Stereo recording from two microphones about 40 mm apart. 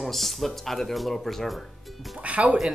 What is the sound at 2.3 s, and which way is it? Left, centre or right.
Speech, right.